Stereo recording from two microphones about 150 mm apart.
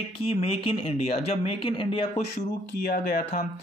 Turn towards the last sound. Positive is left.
turn(degrees=70)  # may be behind; listen again after turning